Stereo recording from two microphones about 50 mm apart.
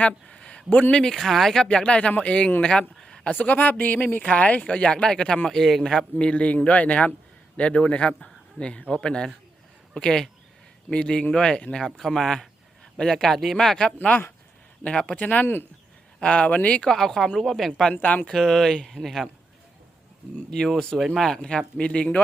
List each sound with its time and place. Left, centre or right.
0.0 s a sound: left
0.9 s speech: centre
1.6 s speech: left
8.2 s a sound: centre
8.9 s speech: centre
11.9 s speech: centre
14.8 s speech: left
16.2 s speech: left
16.9 s speech: centre
20.5 s speech: centre